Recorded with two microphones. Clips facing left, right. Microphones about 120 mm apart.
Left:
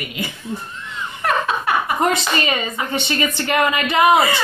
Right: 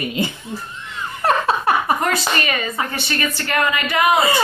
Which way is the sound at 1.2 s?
35° right (ahead or behind).